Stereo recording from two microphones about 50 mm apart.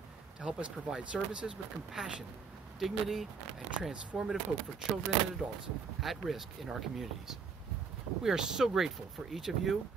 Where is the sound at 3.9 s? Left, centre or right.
Centre.